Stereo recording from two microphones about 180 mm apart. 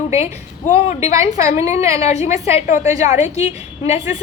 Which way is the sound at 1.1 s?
15° right (ahead or behind).